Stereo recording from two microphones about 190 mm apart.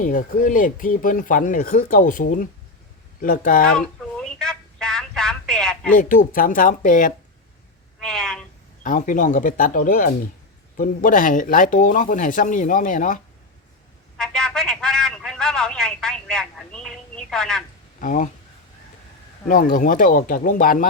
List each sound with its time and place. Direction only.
0.0 s speech: 45° left (ahead or behind)
3.8 s telephone: 5° left (ahead or behind)
6.0 s speech: 45° left (ahead or behind)
8.0 s a sound: 5° left (ahead or behind)
8.8 s speech: 45° left (ahead or behind)
14.2 s telephone: 5° left (ahead or behind)
18.0 s speech: 45° left (ahead or behind)
19.5 s speech: 45° left (ahead or behind)